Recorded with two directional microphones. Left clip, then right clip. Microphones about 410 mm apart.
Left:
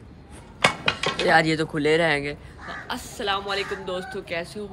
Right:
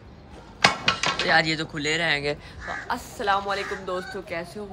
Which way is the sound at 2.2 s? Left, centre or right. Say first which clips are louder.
Right 3 dB; centre.